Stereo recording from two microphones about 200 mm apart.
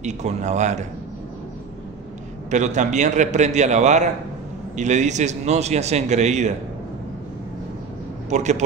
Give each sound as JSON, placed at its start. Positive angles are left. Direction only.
{"t": 0.0, "sound": "a man's voice", "side_deg": -35}
{"t": 2.5, "sound": "a man's voice", "side_deg": -35}
{"t": 8.3, "sound": "a man's voice", "side_deg": -35}